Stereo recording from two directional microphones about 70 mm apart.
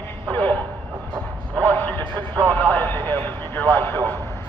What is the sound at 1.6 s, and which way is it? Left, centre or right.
Speech, left.